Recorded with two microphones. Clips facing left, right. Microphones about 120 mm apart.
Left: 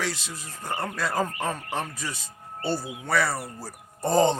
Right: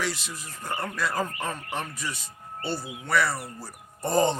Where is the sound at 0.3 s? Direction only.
30° left (ahead or behind).